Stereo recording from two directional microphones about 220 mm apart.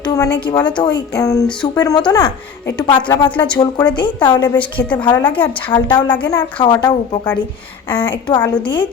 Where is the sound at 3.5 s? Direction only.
15° left (ahead or behind).